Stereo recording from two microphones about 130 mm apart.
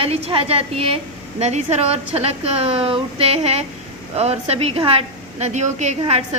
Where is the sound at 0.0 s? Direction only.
45° right (ahead or behind).